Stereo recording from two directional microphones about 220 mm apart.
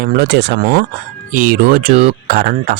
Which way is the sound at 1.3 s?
40° right (ahead or behind).